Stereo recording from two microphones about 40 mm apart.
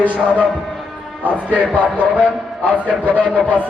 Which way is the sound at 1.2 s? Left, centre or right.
Right.